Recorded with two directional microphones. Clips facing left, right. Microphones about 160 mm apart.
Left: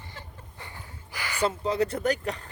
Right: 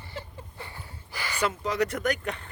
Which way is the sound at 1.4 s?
30° left (ahead or behind).